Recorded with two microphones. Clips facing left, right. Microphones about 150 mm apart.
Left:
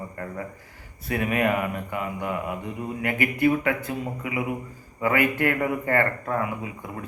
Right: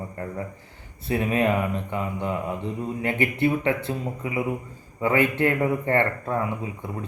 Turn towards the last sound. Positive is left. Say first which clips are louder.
# right 1 dB
turn(degrees=-30)  # may be behind; listen again after turning